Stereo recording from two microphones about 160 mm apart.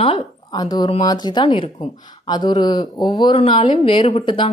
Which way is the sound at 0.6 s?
25° left (ahead or behind).